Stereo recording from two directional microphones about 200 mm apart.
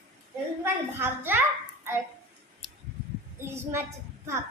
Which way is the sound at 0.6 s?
10° right (ahead or behind).